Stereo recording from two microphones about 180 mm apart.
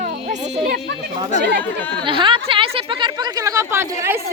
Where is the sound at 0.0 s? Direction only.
45° right (ahead or behind).